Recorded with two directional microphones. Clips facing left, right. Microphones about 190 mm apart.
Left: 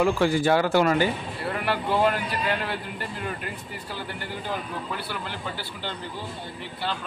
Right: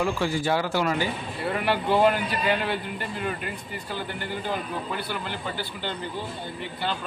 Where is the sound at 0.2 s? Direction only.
55° left (ahead or behind).